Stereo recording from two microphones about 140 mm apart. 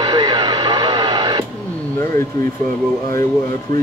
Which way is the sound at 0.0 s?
30° right (ahead or behind).